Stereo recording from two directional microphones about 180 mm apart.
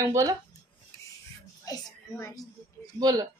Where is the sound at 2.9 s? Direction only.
20° right (ahead or behind).